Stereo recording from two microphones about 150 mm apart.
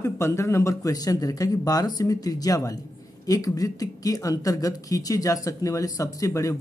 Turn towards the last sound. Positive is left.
turn(degrees=20)  # may be behind; listen again after turning